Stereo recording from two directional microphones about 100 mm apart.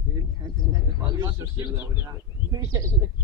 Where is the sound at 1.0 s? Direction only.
40° right (ahead or behind).